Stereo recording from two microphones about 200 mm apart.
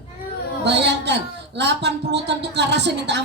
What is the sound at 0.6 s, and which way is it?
A woman's voice, 60° right (ahead or behind).